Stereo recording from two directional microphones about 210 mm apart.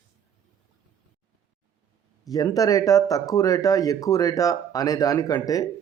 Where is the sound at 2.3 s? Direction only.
15° left (ahead or behind).